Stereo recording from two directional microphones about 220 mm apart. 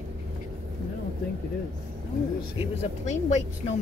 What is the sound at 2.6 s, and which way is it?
Speech, 30° left (ahead or behind).